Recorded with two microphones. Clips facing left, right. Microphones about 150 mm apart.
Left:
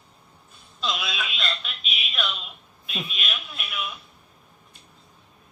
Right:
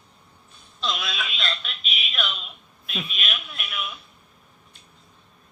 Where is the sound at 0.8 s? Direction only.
5° left (ahead or behind).